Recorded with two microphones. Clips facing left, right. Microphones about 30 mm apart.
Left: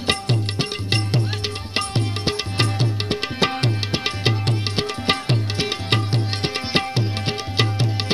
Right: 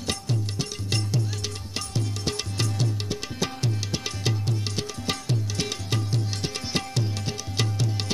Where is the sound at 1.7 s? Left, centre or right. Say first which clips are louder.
Left 8 dB; left.